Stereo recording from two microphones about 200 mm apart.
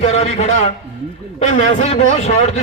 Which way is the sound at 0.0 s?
30° left (ahead or behind).